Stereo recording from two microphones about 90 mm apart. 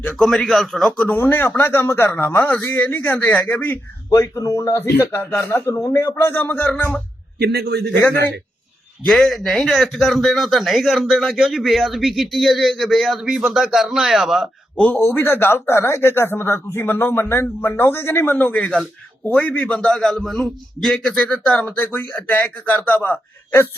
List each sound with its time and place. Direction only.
0.1 s speech: 5° left (ahead or behind)
0.9 s a man's voice: 20° left (ahead or behind)
4.1 s speech: 35° left (ahead or behind); by 5.5 s 20° left (ahead or behind)
5.5 s a man's voice: 30° left (ahead or behind)
9.0 s speech: centre (ahead or behind)
14.8 s a man's voice: 15° left (ahead or behind)